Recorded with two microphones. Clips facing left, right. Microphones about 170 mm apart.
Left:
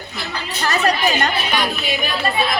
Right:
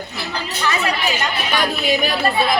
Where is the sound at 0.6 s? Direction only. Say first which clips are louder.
Left 3 dB; 40° left (ahead or behind).